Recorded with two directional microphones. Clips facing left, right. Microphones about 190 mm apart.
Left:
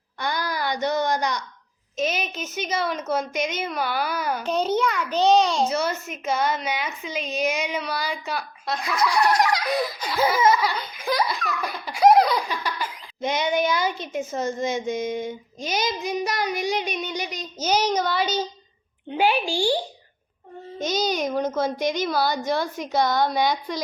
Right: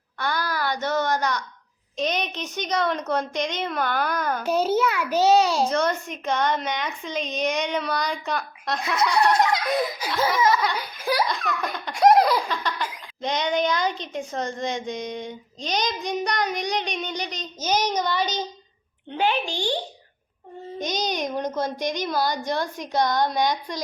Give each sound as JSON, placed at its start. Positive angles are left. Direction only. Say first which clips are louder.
{"t": 0.2, "sound": "a child's voice", "louder": "even", "side_deg": 15}
{"t": 4.4, "sound": "a child's voice", "louder": "right 1 dB", "side_deg": -5}
{"t": 5.6, "sound": "a woman's voice", "louder": "right 1 dB", "side_deg": 5}
{"t": 8.8, "sound": "speech", "louder": "right 1 dB", "side_deg": -25}
{"t": 9.6, "sound": "a woman's voice", "louder": "right 1 dB", "side_deg": 0}
{"t": 10.8, "sound": "a sound", "louder": "even", "side_deg": -10}
{"t": 11.3, "sound": "laughter", "louder": "right 1 dB", "side_deg": 0}
{"t": 12.6, "sound": "a child's voice", "louder": "right 1 dB", "side_deg": 10}
{"t": 20.9, "sound": "a woman's voice", "louder": "left 3 dB", "side_deg": 5}